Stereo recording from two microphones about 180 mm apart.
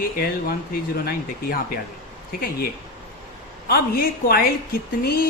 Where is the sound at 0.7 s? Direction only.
60° left (ahead or behind).